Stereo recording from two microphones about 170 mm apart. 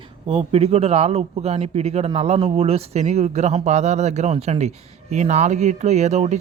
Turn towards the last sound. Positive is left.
turn(degrees=-40)  # may be behind; listen again after turning